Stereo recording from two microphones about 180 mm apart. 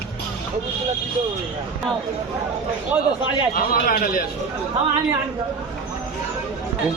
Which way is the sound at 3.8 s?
55° left (ahead or behind).